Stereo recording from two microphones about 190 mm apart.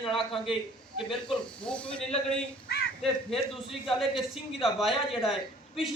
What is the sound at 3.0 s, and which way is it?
A woman's voice, centre (ahead or behind).